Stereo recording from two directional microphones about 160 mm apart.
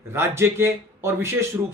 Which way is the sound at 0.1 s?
15° right (ahead or behind).